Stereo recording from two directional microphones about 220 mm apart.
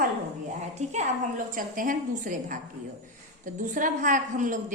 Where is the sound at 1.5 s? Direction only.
40° right (ahead or behind).